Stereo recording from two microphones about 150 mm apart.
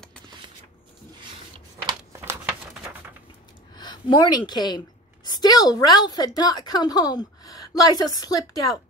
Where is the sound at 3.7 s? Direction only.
30° left (ahead or behind).